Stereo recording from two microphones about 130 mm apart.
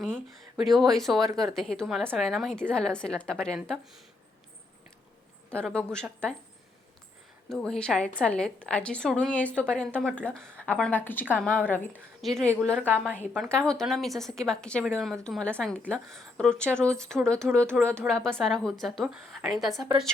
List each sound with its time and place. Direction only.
0.5 s a woman's voice: centre (ahead or behind)
5.5 s a woman's voice: 10° left (ahead or behind)
7.5 s a woman's voice: 5° left (ahead or behind)
17.7 s speech: 20° right (ahead or behind)
18.0 s a woman's voice: 5° left (ahead or behind)